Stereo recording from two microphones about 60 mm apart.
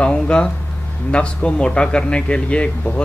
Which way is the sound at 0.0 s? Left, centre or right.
Centre.